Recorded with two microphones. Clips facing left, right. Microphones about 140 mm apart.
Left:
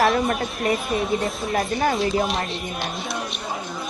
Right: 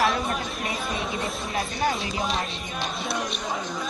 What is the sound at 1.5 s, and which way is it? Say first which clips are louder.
Speech: left 5 dB; 50° left (ahead or behind).